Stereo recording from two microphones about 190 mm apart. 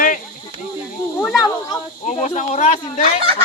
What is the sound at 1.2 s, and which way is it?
Speech, centre (ahead or behind).